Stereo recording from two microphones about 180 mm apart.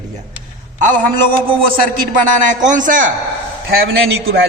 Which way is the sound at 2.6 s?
45° right (ahead or behind).